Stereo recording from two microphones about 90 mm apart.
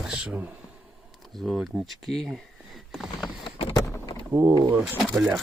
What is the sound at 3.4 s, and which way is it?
Vehicle, 90° left.